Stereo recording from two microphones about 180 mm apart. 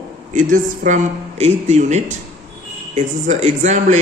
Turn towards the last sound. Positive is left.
turn(degrees=-40)  # may be behind; listen again after turning